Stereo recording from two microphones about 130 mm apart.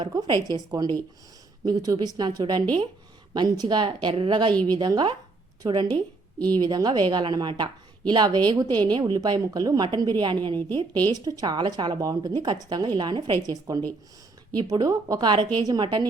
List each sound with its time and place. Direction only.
0.0 s a woman's voice: 30° right (ahead or behind)